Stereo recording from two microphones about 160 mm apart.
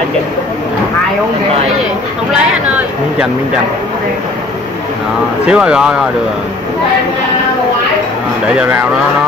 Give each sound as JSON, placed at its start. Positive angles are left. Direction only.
{"t": 5.5, "sound": "speech", "side_deg": -5}